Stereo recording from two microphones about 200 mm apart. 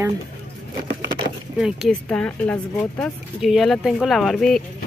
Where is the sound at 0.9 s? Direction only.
60° right (ahead or behind).